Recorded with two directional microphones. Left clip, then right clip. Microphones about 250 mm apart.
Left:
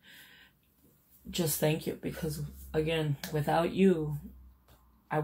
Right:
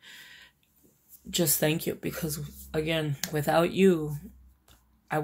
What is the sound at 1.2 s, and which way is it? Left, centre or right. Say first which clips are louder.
Speech: right 4 dB; right.